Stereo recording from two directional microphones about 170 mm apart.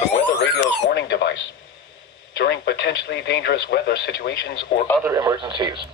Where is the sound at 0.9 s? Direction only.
80° left.